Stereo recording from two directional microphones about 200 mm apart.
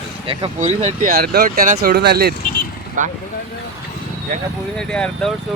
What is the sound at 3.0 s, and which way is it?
Speech, 40° right (ahead or behind).